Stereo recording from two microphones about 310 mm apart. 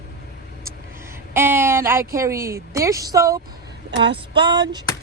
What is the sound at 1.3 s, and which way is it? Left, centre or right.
A woman's voice, centre.